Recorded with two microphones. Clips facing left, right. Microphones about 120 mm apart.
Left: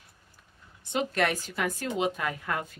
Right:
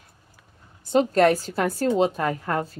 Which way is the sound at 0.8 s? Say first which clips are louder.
Right 10 dB; 40° right (ahead or behind).